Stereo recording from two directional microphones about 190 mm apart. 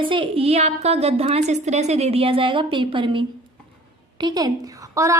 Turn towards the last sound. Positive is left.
turn(degrees=-15)  # may be behind; listen again after turning